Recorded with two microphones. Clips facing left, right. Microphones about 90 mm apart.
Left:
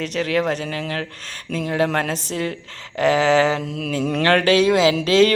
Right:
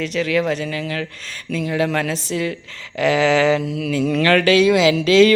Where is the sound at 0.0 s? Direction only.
50° left (ahead or behind).